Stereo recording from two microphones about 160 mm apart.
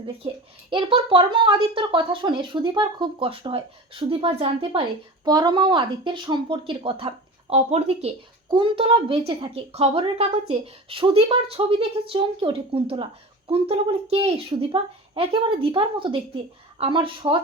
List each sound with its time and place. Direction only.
0.7 s a woman's voice: 35° right (ahead or behind)
5.2 s a woman's voice: 25° right (ahead or behind)